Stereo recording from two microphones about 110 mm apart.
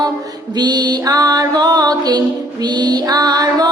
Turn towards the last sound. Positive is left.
turn(degrees=-35)  # may be behind; listen again after turning